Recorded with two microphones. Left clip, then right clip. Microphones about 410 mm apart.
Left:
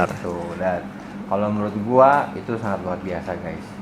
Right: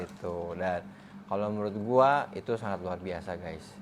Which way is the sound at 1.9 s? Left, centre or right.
Right.